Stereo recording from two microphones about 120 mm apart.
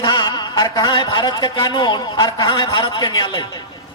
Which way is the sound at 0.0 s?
40° left (ahead or behind).